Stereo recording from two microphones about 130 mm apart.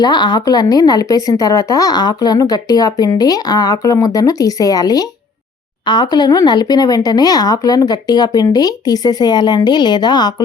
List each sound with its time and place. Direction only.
0.0 s a woman's voice: 35° left (ahead or behind)